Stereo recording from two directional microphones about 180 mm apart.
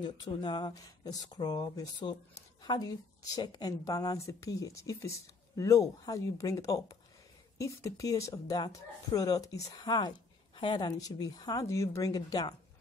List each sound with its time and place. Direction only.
0.0 s speech: 25° left (ahead or behind)